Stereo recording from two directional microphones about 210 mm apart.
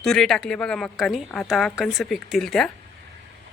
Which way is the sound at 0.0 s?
Centre (ahead or behind).